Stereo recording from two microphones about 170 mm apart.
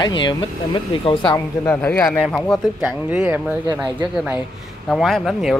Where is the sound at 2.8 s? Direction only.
10° right (ahead or behind).